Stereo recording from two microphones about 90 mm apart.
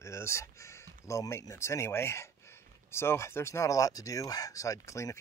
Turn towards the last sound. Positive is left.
turn(degrees=35)  # may be behind; listen again after turning